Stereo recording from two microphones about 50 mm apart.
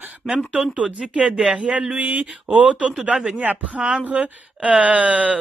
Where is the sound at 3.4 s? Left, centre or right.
Right.